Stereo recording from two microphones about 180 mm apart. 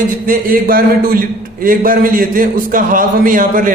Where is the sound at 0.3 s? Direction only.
50° right (ahead or behind).